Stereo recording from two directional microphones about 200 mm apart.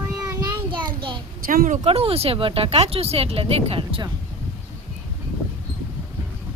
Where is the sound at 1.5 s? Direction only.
40° right (ahead or behind); by 4.1 s 25° right (ahead or behind).